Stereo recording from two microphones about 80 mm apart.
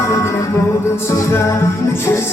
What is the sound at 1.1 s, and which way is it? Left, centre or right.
Music, left.